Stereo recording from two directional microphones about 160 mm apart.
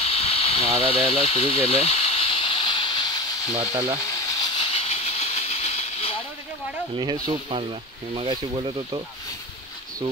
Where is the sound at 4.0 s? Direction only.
20° left (ahead or behind); by 6.2 s 40° left (ahead or behind).